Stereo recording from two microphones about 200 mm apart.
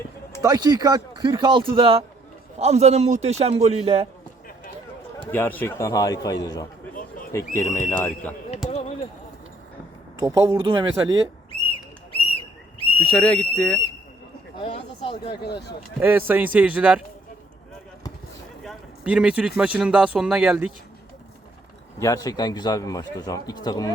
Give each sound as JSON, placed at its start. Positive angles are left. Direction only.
{"t": 0.4, "sound": "a man's voice", "side_deg": -20}
{"t": 5.3, "sound": "a man's voice", "side_deg": 10}
{"t": 6.9, "sound": "a sound", "side_deg": 45}
{"t": 7.3, "sound": "a man's voice", "side_deg": 15}
{"t": 8.7, "sound": "a sound", "side_deg": 30}
{"t": 10.2, "sound": "speech", "side_deg": -15}
{"t": 13.1, "sound": "speech", "side_deg": 5}
{"t": 14.5, "sound": "a sound", "side_deg": 30}
{"t": 15.3, "sound": "speech", "side_deg": 55}
{"t": 16.0, "sound": "speech", "side_deg": -10}
{"t": 18.6, "sound": "speech", "side_deg": 0}
{"t": 21.9, "sound": "a man's voice", "side_deg": 15}